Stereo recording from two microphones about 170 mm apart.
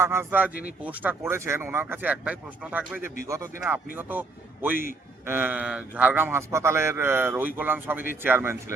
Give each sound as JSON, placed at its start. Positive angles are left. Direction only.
{"t": 0.0, "sound": "a man's voice", "side_deg": -15}